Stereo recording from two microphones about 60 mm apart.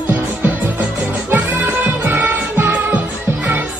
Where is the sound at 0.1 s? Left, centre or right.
Right.